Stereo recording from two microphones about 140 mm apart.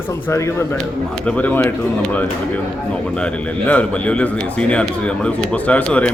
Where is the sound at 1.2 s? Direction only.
10° left (ahead or behind).